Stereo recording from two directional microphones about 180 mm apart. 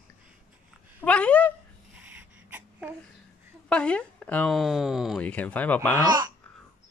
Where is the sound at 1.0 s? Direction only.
5° left (ahead or behind).